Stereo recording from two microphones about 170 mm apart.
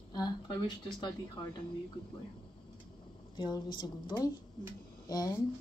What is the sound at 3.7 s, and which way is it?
Speech, 25° left (ahead or behind).